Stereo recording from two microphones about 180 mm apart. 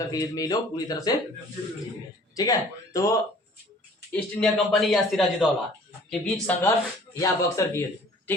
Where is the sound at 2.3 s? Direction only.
20° left (ahead or behind).